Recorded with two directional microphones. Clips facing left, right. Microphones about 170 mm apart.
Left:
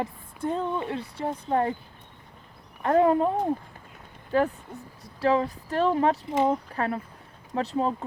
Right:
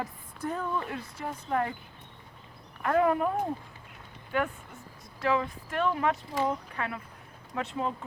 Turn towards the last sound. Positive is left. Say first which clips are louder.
# left 6 dB
turn(degrees=35)  # may be behind; listen again after turning